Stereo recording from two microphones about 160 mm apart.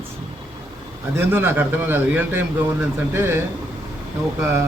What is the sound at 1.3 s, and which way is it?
A man's voice, 15° right (ahead or behind).